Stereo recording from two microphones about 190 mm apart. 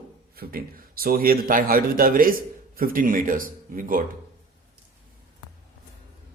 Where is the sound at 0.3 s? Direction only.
50° right (ahead or behind).